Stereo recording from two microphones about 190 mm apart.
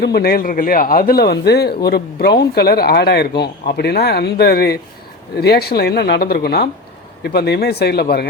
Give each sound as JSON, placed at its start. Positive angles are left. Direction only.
{"t": 0.0, "sound": "speech", "side_deg": 55}